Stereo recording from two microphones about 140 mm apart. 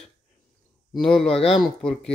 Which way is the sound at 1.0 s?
5° left (ahead or behind).